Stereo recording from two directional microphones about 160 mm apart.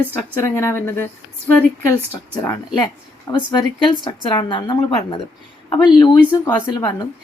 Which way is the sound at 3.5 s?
30° left (ahead or behind).